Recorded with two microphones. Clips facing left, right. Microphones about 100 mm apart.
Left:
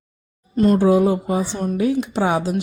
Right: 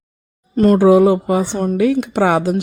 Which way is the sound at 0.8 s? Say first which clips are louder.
Right 5 dB; 80° right.